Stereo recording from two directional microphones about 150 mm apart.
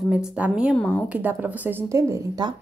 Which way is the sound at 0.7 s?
5° left (ahead or behind).